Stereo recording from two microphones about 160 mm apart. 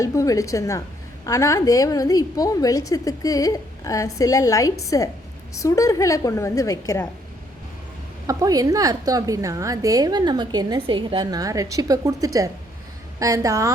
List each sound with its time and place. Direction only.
0.0 s a woman's voice: 20° left (ahead or behind)
8.3 s a woman's voice: 20° right (ahead or behind)